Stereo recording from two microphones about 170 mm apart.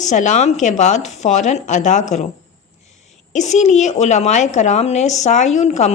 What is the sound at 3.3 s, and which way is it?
A woman's voice, 45° left (ahead or behind).